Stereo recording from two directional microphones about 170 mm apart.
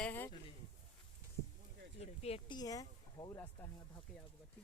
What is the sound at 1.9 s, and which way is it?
Speech, 35° left (ahead or behind).